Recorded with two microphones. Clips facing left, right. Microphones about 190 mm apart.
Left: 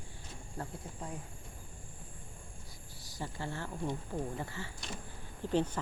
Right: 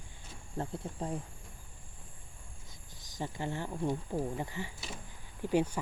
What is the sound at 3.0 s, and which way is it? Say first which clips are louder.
Speech: right 3 dB; 20° right (ahead or behind).